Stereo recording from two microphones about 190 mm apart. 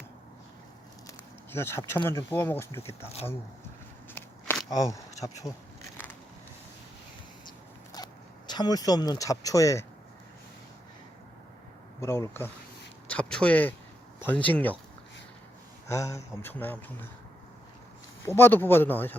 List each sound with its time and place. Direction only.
1.0 s a sound: 10° left (ahead or behind)
2.0 s speech: 10° left (ahead or behind)
4.1 s a sound: 10° left (ahead or behind)
5.2 s speech: 15° left (ahead or behind)
7.9 s speech: 20° left (ahead or behind)
11.9 s speech: 15° left (ahead or behind)
15.9 s speech: 15° left (ahead or behind)
18.3 s speech: 10° left (ahead or behind)